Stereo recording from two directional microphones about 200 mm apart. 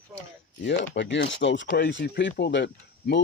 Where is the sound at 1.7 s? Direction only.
50° left (ahead or behind).